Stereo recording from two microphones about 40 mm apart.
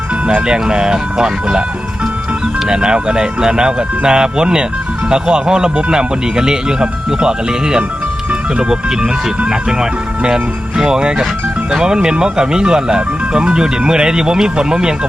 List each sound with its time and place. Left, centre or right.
0.3 s speech: right
2.6 s speech: right
10.2 s speech: centre